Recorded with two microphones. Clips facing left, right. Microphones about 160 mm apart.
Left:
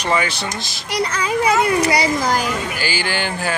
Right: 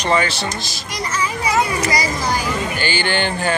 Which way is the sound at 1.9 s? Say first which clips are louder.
Left 3 dB; 50° left (ahead or behind).